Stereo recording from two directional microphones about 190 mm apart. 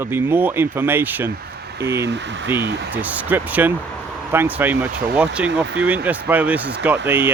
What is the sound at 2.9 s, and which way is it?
A man's voice, 10° right (ahead or behind).